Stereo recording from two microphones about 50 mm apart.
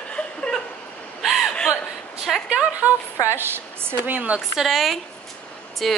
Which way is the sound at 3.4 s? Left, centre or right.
Right.